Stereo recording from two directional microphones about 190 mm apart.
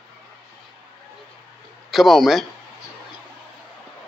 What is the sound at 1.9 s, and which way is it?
Speech, centre (ahead or behind).